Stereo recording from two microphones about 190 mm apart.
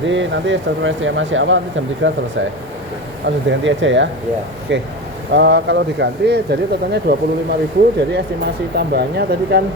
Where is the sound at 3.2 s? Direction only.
75° right (ahead or behind); by 7.2 s 60° right (ahead or behind).